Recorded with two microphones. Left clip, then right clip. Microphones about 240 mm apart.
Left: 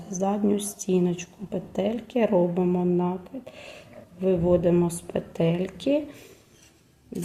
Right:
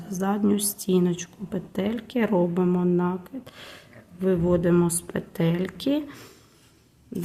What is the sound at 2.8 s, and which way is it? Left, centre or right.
Speech, right.